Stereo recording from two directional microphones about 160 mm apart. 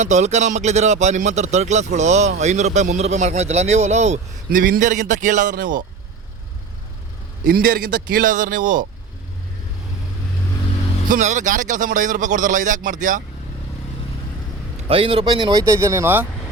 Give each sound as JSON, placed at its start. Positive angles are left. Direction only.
{"t": 0.0, "sound": "a man's voice", "side_deg": -45}
{"t": 4.4, "sound": "a man's voice", "side_deg": -60}
{"t": 7.4, "sound": "a man's voice", "side_deg": -80}
{"t": 11.1, "sound": "a man's voice", "side_deg": -50}
{"t": 14.8, "sound": "speech", "side_deg": -35}